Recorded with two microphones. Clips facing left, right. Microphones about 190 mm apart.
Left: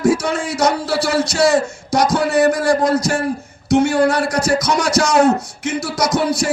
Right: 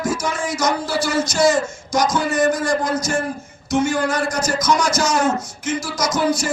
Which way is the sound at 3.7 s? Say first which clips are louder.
Left 5 dB; 65° left (ahead or behind).